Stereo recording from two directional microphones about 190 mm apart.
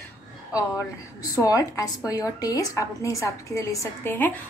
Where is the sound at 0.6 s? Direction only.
15° left (ahead or behind).